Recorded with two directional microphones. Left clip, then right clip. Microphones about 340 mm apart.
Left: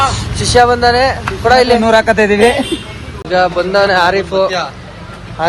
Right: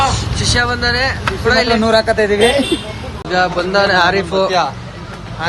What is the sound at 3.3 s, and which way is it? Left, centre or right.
A man's voice, centre.